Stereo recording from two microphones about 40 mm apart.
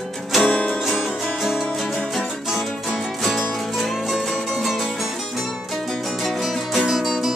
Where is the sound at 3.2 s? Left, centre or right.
Centre.